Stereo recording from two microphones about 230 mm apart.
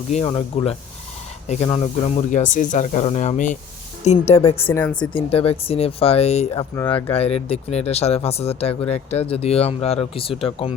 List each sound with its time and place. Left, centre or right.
0.1 s speech: left
4.7 s speech: centre
4.9 s speech: left